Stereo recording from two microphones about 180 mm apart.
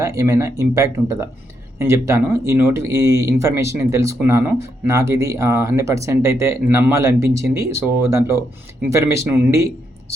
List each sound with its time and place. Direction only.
0.0 s speech: 20° right (ahead or behind)